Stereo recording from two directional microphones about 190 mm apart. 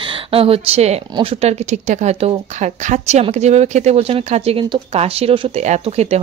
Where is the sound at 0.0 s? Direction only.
30° right (ahead or behind).